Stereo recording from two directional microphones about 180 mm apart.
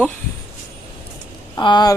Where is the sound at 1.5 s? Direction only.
25° left (ahead or behind).